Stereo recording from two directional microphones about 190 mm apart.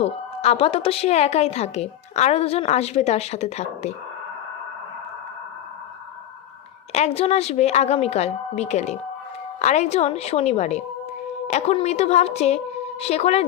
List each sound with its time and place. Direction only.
0.0 s a woman's voice: 30° left (ahead or behind)
6.9 s a woman's voice: 35° left (ahead or behind)